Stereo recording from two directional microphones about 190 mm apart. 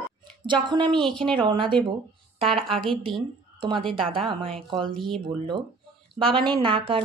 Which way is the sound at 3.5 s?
25° right (ahead or behind).